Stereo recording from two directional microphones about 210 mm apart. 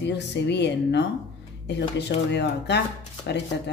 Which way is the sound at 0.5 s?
55° left (ahead or behind).